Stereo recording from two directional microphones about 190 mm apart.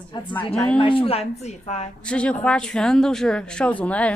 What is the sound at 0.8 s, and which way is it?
A woman's voice, 30° left (ahead or behind).